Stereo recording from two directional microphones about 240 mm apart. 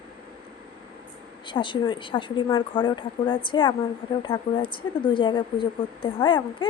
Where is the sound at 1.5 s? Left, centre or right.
Centre.